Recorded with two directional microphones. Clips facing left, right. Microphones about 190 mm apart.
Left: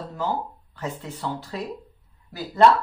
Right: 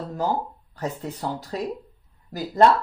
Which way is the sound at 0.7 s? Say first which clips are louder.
Right 3 dB; 35° right (ahead or behind).